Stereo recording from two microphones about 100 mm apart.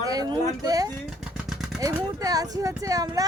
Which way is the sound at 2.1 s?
40° right (ahead or behind).